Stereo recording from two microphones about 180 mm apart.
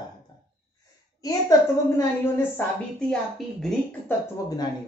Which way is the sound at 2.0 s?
15° left (ahead or behind).